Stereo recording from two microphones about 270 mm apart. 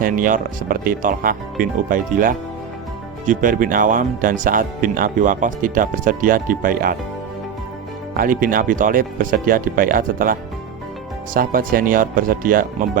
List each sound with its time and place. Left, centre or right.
0.0 s speech: right
8.1 s speech: right
11.3 s speech: right